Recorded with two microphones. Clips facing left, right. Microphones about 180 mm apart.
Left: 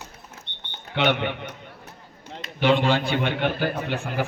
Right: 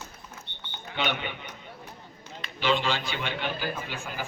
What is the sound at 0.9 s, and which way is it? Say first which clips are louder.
A man's voice: left 8 dB; 65° left (ahead or behind).